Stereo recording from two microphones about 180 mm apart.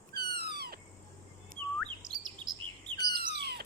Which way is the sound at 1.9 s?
25° right (ahead or behind).